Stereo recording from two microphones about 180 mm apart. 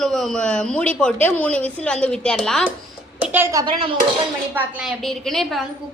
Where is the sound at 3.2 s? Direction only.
10° right (ahead or behind); by 3.9 s 25° right (ahead or behind).